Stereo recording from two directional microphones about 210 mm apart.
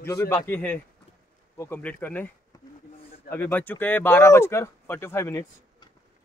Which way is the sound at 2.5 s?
20° left (ahead or behind).